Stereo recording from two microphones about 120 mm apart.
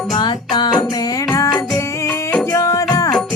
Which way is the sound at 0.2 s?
35° left (ahead or behind).